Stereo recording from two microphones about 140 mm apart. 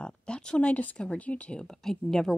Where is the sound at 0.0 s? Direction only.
5° left (ahead or behind).